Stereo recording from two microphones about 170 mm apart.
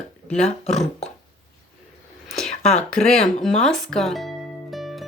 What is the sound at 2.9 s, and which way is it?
Speech, 5° left (ahead or behind).